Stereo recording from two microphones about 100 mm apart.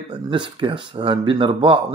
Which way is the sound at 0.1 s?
55° right (ahead or behind).